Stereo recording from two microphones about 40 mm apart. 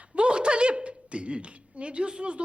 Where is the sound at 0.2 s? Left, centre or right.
Right.